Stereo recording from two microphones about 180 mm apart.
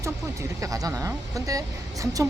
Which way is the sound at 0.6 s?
20° right (ahead or behind).